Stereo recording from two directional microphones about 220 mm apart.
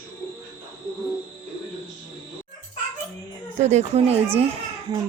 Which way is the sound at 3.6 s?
30° right (ahead or behind).